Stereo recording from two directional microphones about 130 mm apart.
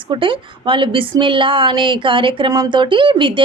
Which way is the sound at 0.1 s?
40° right (ahead or behind).